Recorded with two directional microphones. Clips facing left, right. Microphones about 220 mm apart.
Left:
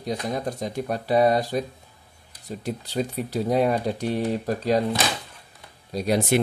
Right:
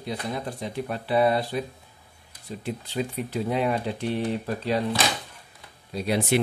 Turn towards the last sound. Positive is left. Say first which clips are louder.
# left 2 dB
turn(degrees=45)  # may be behind; listen again after turning